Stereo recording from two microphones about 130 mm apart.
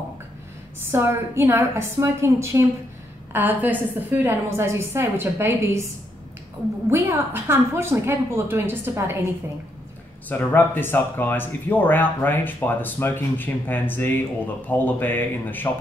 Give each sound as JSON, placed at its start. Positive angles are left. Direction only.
{"t": 0.7, "sound": "a woman's voice", "side_deg": -20}
{"t": 6.9, "sound": "a woman's voice", "side_deg": -15}
{"t": 10.2, "sound": "speech", "side_deg": 15}